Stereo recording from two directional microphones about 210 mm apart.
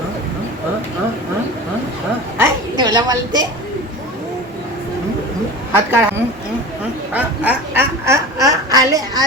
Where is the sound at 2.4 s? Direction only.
20° right (ahead or behind).